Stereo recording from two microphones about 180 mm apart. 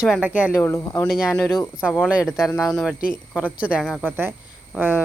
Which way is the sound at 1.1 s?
5° right (ahead or behind).